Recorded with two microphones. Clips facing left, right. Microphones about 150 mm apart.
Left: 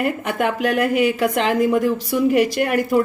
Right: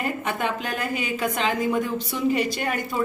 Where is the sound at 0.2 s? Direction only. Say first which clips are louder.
Left 6 dB; 65° left (ahead or behind).